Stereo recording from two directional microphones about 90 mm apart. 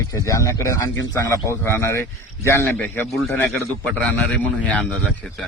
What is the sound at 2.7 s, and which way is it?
Speech, 20° left (ahead or behind).